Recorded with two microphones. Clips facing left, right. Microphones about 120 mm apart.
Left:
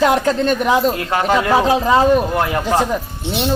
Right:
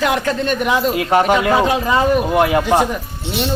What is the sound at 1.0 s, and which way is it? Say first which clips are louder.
A man's voice: right 3 dB; 15° right (ahead or behind).